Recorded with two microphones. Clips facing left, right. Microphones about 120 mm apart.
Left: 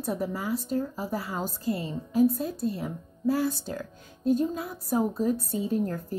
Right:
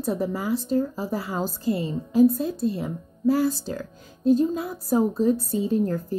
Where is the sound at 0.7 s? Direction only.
30° right (ahead or behind).